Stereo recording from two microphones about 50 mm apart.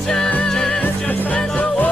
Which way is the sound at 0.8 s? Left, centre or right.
Left.